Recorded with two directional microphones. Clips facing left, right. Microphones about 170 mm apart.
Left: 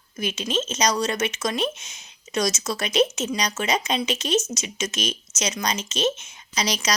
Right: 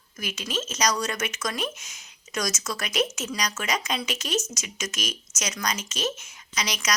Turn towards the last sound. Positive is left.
turn(degrees=30)  # may be behind; listen again after turning